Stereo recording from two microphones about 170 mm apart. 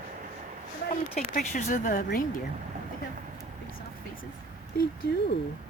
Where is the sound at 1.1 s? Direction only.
50° left (ahead or behind).